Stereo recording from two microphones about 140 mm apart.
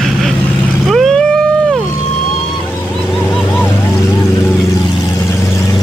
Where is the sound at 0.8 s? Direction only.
Centre (ahead or behind).